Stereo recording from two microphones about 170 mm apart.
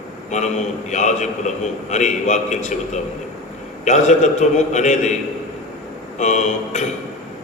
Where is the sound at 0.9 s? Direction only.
45° left (ahead or behind).